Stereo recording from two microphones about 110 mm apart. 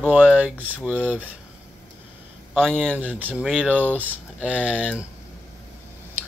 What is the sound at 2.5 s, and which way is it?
Speech, 5° left (ahead or behind).